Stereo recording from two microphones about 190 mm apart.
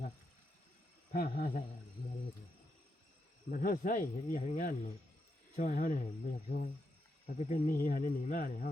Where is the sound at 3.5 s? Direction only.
45° left (ahead or behind).